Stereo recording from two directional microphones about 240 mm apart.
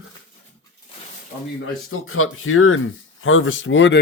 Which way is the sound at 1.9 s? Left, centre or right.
Left.